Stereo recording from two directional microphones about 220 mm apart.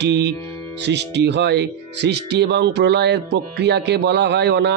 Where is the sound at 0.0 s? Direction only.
50° right (ahead or behind).